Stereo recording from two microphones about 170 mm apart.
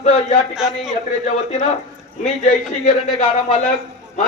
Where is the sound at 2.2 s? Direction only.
45° left (ahead or behind).